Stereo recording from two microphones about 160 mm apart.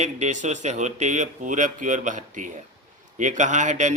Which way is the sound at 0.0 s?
50° right (ahead or behind).